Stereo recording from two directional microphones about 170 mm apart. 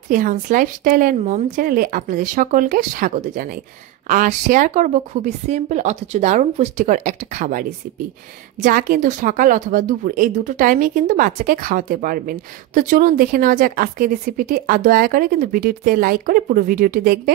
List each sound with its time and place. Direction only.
0.1 s a woman's voice: 50° right (ahead or behind)